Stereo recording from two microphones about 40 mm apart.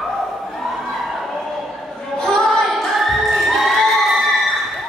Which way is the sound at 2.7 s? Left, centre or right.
Centre.